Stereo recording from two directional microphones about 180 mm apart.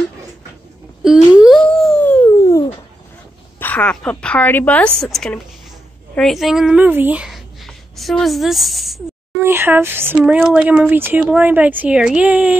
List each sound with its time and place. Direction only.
1.0 s a sound: 5° right (ahead or behind); by 2.6 s 10° left (ahead or behind)
3.5 s a woman's voice: 10° left (ahead or behind)
9.4 s speech: 10° right (ahead or behind)